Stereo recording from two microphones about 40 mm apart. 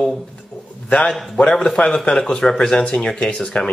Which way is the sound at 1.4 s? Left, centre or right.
Centre.